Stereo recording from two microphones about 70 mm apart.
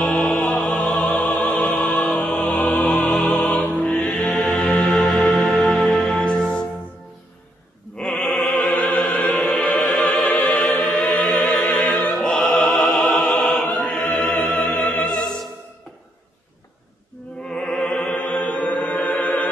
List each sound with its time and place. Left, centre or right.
0.0 s music: centre
3.6 s music: left
4.0 s music: centre
4.3 s music: left
4.6 s music: centre
8.0 s opera: centre
9.2 s music: centre
11.9 s opera: left
12.2 s opera: centre
13.8 s music: centre
17.5 s music: centre